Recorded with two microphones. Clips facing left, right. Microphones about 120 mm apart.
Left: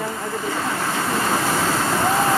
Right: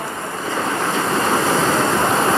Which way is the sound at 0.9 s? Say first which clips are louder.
Right 3 dB; 20° right (ahead or behind).